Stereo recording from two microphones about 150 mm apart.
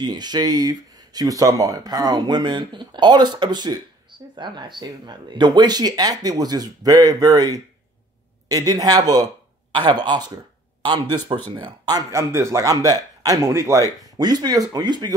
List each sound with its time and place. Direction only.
0.0 s speech: 30° right (ahead or behind)